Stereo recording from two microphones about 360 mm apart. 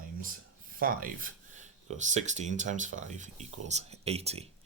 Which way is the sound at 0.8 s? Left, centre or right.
Right.